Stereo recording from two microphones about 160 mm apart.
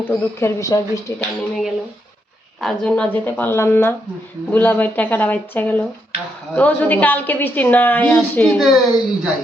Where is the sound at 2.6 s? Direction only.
5° left (ahead or behind).